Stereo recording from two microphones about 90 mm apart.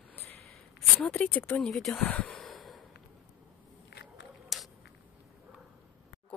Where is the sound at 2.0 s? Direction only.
15° left (ahead or behind).